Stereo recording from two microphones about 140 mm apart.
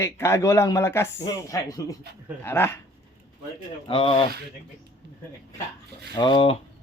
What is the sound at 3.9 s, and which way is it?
Speech, 40° left (ahead or behind).